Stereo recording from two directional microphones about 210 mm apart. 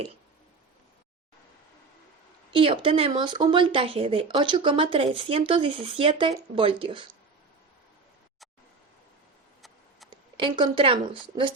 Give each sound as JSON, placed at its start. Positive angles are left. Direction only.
{"t": 2.5, "sound": "speech", "side_deg": -25}
{"t": 10.1, "sound": "speech", "side_deg": -25}